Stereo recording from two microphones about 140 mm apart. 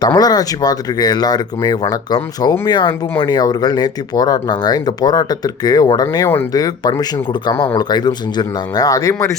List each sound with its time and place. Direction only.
0.0 s speech: 30° left (ahead or behind)